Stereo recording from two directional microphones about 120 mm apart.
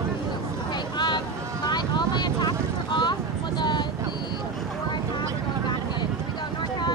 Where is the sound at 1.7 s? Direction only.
35° left (ahead or behind).